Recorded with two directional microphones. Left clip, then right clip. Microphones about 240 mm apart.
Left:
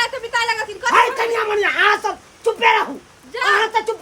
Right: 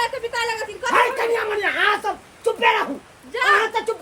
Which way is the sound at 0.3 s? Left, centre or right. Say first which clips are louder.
Left 4 dB; centre.